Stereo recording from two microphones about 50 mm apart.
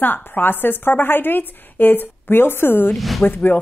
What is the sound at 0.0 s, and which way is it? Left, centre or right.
A woman's voice, left.